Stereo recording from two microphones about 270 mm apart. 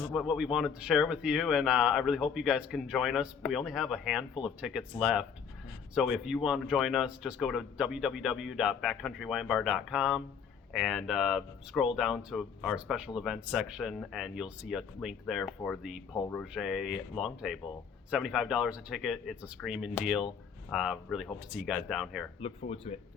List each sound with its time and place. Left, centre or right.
0.1 s speech: centre
22.4 s speech: left